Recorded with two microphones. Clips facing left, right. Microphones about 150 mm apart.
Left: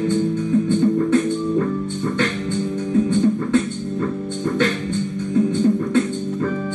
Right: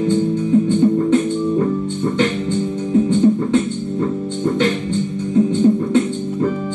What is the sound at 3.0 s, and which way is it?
Music, 20° right (ahead or behind).